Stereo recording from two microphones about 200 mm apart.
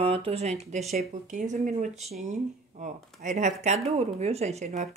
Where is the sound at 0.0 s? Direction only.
30° right (ahead or behind).